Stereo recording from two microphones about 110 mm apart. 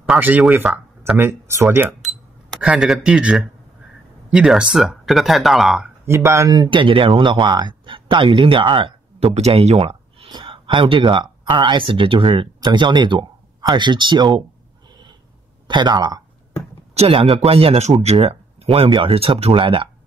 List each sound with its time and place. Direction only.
1.1 s speech: 20° right (ahead or behind)
2.6 s speech: 5° right (ahead or behind)
6.0 s speech: 25° right (ahead or behind); by 9.3 s 55° right (ahead or behind)
9.3 s speech: 70° right (ahead or behind)
10.2 s speech: 50° right (ahead or behind)
15.6 s speech: 45° right (ahead or behind)
16.9 s speech: 65° right (ahead or behind)
18.0 s speech: 60° right (ahead or behind)